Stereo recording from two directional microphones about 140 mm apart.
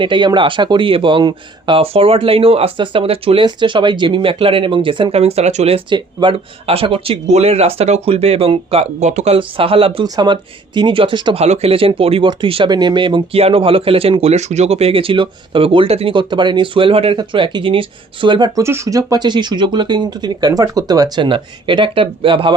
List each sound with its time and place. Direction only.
0.0 s speech: 35° right (ahead or behind)
11.3 s speech: 50° right (ahead or behind); by 18.6 s 30° right (ahead or behind)
18.6 s speech: 20° right (ahead or behind); by 22.5 s 40° right (ahead or behind)